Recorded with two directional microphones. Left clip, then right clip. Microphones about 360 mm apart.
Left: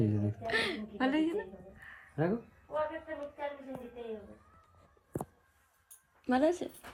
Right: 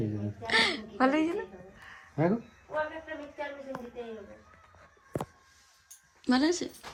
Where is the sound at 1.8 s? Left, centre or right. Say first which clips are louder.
Right 5 dB; centre.